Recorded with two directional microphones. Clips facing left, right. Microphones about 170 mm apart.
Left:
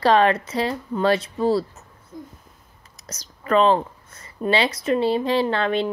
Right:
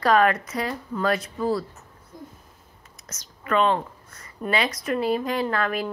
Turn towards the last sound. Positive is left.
turn(degrees=25)  # may be behind; listen again after turning